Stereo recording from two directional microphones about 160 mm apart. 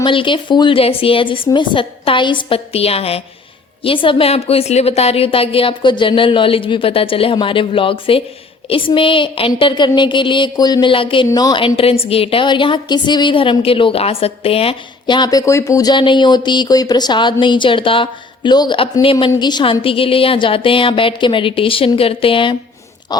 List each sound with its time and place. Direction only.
0.0 s a woman's voice: 30° left (ahead or behind)